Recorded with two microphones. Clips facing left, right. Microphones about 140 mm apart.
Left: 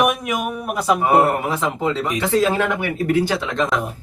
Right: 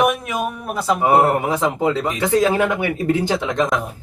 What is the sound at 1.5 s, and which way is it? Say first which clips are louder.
Speech: right 3 dB; 15° right (ahead or behind).